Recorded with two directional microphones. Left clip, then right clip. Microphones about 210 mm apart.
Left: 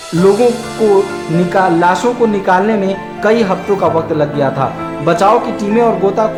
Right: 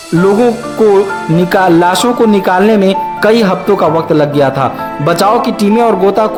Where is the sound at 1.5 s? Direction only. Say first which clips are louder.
Right 2 dB; 40° right (ahead or behind).